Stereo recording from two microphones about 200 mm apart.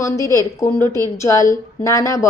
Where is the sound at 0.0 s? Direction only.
15° left (ahead or behind).